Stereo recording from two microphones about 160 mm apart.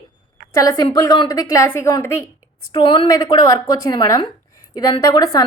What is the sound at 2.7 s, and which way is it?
A woman's voice, 30° left (ahead or behind).